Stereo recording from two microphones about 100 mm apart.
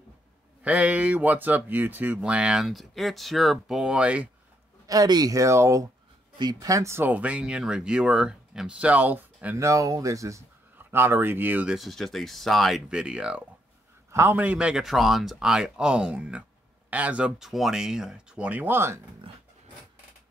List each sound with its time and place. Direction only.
0.7 s speech: 15° right (ahead or behind)
4.8 s speech: 40° right (ahead or behind)
6.3 s speech: 45° right (ahead or behind)
6.7 s speech: 30° right (ahead or behind)
9.6 s speech: 30° right (ahead or behind)
10.8 s speech: 20° right (ahead or behind)
11.7 s speech: centre (ahead or behind)
14.1 s a man's voice: 25° right (ahead or behind)
14.4 s speech: 10° right (ahead or behind)